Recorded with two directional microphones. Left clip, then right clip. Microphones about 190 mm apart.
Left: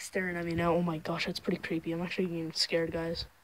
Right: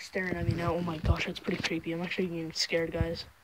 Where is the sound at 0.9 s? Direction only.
15° left (ahead or behind).